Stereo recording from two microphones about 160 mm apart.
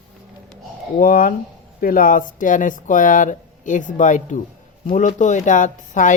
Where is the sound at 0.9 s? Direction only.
60° left (ahead or behind).